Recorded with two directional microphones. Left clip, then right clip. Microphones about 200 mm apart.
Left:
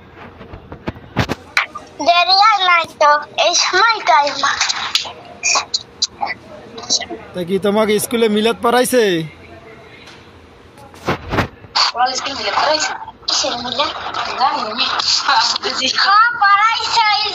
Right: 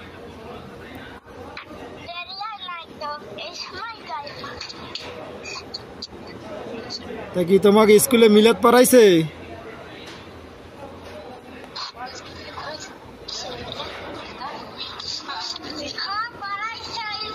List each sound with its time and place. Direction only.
1.5 s a child's voice: 45° left (ahead or behind)
7.3 s speech: 10° right (ahead or behind)
11.7 s a sound: 40° left (ahead or behind)